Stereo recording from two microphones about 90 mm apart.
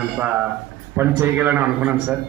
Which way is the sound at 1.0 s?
25° right (ahead or behind).